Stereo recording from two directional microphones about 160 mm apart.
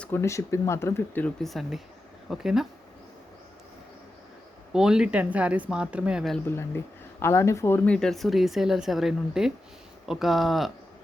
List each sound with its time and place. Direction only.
0.0 s speech: 15° left (ahead or behind); by 2.6 s 5° right (ahead or behind)
4.7 s speech: 5° right (ahead or behind)
6.5 s speech: 15° left (ahead or behind)
7.9 s speech: centre (ahead or behind)